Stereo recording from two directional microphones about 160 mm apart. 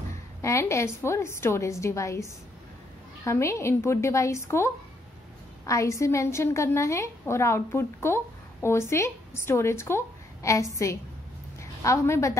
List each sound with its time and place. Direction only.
0.4 s a woman's voice: 15° left (ahead or behind)